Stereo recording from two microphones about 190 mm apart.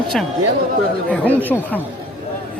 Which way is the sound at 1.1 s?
5° left (ahead or behind).